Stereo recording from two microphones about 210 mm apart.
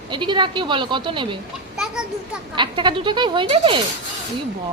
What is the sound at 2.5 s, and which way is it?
A woman's voice, 20° right (ahead or behind).